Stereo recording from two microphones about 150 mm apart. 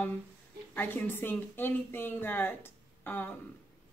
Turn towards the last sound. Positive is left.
turn(degrees=15)  # may be behind; listen again after turning